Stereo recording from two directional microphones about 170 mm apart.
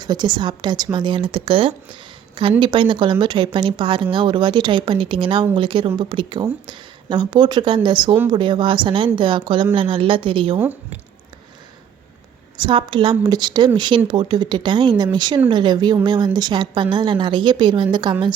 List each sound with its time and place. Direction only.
0.0 s a woman's voice: 25° right (ahead or behind)
12.5 s speech: 30° right (ahead or behind)